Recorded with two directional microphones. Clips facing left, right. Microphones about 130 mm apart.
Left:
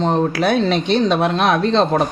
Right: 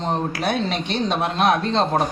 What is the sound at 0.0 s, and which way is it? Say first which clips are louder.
A man's voice: left 6 dB; 90° left.